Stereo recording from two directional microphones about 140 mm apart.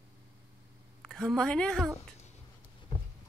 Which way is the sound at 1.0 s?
Centre (ahead or behind).